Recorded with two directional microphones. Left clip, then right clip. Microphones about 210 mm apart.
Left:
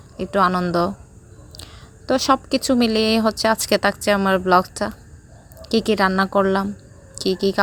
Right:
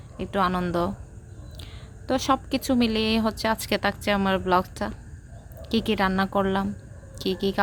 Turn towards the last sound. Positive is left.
turn(degrees=20)  # may be behind; listen again after turning